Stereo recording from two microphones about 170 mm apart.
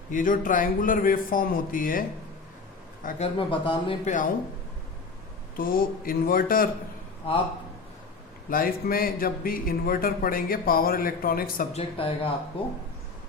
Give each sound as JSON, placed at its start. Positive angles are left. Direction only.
{"t": 0.1, "sound": "a man's voice", "side_deg": 50}
{"t": 3.3, "sound": "speech", "side_deg": 30}
{"t": 4.0, "sound": "speech", "side_deg": 50}
{"t": 5.5, "sound": "speech", "side_deg": 55}
{"t": 8.4, "sound": "speech", "side_deg": 60}
{"t": 11.7, "sound": "speech", "side_deg": 35}